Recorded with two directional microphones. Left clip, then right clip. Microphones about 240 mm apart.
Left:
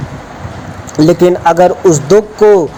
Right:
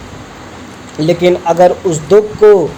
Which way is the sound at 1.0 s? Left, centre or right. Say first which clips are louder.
Left 3 dB; left.